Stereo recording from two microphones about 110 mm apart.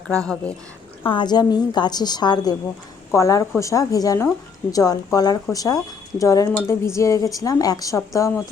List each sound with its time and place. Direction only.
1.0 s a woman's voice: 45° left (ahead or behind); by 8.4 s 30° left (ahead or behind)